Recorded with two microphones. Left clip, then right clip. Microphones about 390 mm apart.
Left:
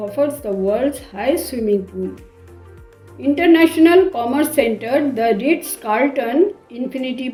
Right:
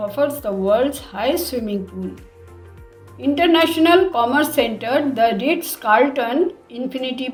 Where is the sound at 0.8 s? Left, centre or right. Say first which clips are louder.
Even; right.